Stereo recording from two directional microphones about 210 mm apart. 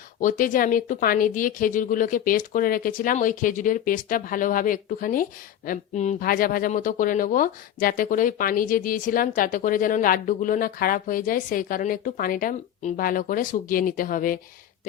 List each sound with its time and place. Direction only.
0.2 s speech: 40° left (ahead or behind)